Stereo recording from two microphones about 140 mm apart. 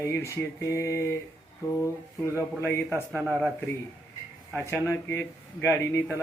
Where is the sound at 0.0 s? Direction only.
20° left (ahead or behind).